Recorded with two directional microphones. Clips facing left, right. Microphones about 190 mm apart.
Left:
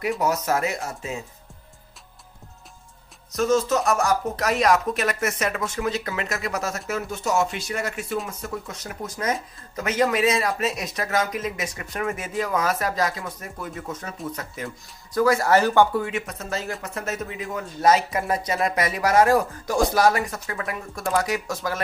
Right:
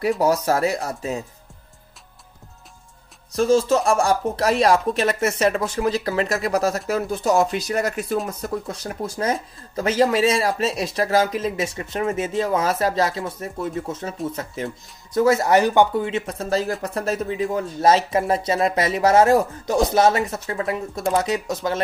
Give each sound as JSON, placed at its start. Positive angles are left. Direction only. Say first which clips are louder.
{"t": 0.2, "sound": "speech", "louder": "right 4 dB", "side_deg": -30}
{"t": 3.3, "sound": "speech", "louder": "right 4 dB", "side_deg": -30}